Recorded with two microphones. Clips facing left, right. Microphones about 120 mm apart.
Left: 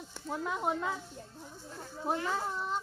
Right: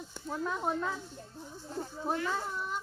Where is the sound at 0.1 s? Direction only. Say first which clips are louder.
Even; 5° left (ahead or behind).